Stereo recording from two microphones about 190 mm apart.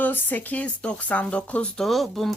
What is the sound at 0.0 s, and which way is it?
Speech, 10° left (ahead or behind).